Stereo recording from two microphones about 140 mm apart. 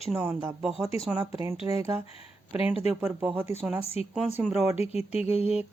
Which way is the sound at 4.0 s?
45° left (ahead or behind).